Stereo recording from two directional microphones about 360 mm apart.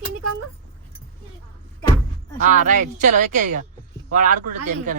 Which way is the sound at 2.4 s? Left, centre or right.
Right.